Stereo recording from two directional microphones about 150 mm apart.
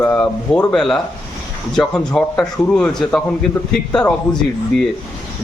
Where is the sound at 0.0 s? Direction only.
10° left (ahead or behind).